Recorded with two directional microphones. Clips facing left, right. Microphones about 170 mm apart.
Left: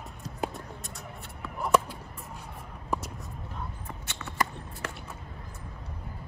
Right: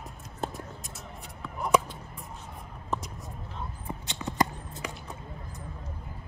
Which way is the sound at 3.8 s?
15° right (ahead or behind).